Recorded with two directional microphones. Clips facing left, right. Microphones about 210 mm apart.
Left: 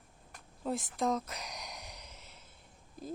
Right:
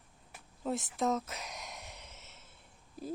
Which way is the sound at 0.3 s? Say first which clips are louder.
Even; centre (ahead or behind).